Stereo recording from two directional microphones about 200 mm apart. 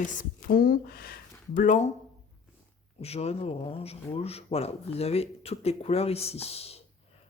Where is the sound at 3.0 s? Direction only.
30° left (ahead or behind).